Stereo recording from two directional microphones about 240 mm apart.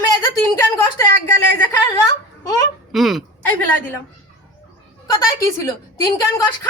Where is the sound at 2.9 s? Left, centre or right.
Centre.